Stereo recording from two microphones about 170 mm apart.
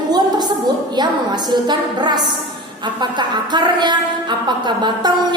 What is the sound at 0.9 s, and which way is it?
A woman's voice, 25° right (ahead or behind).